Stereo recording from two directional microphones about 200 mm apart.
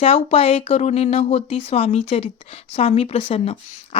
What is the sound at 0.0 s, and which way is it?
A woman's voice, 30° left (ahead or behind).